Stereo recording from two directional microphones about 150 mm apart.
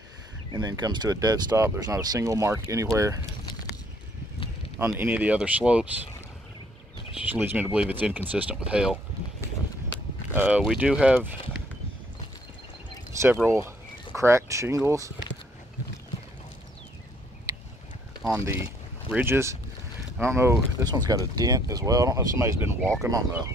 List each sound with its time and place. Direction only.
0.5 s speech: 30° right (ahead or behind)
4.7 s speech: 15° right (ahead or behind)
7.2 s speech: 15° right (ahead or behind)
10.3 s speech: 10° right (ahead or behind)
13.2 s speech: 15° right (ahead or behind)
18.3 s speech: 20° right (ahead or behind)